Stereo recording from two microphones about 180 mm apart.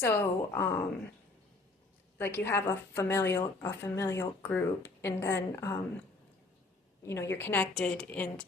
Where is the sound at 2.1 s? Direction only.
10° left (ahead or behind).